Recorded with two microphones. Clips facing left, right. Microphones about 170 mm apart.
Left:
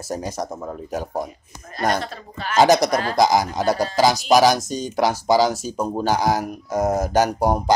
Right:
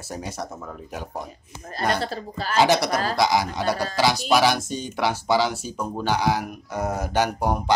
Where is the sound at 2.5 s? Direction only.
45° left (ahead or behind).